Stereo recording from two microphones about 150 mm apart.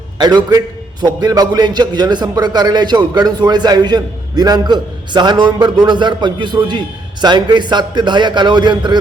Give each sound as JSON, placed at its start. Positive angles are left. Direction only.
{"t": 0.2, "sound": "a man's voice", "side_deg": -25}